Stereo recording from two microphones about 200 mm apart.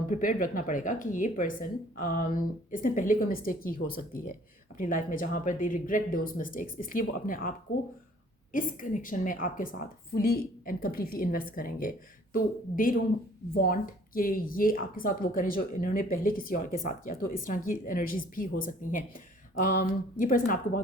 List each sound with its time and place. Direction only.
0.1 s a woman's voice: 40° left (ahead or behind)
8.5 s a woman's voice: 40° left (ahead or behind)